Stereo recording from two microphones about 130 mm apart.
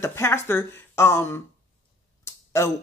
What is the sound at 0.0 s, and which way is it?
Speech, 20° left (ahead or behind).